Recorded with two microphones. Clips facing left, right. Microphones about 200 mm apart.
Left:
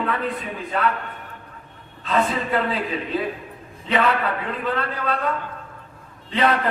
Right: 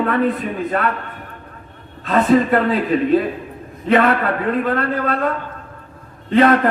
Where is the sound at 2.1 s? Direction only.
50° right (ahead or behind).